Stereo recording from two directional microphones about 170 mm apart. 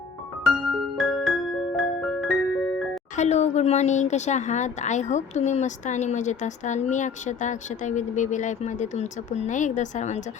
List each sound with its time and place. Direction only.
0.9 s music: centre (ahead or behind)
3.2 s a woman's voice: 40° left (ahead or behind)